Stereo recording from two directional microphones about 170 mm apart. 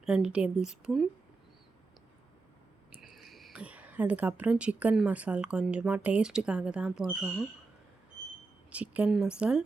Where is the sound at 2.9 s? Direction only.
5° right (ahead or behind).